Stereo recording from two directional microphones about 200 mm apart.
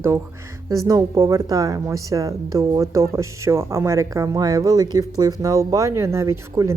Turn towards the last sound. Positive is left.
turn(degrees=-15)  # may be behind; listen again after turning